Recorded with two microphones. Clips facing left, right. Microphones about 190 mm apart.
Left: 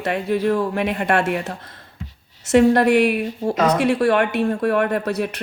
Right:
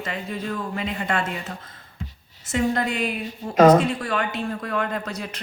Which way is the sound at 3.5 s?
45° right (ahead or behind).